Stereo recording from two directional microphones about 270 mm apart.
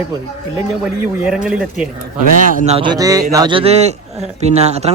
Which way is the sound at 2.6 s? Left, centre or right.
Centre.